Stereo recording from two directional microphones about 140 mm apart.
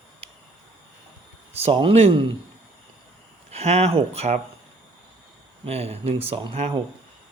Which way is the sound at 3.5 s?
50° right (ahead or behind).